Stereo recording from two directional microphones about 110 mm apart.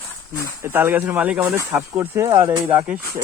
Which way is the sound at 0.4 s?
25° right (ahead or behind).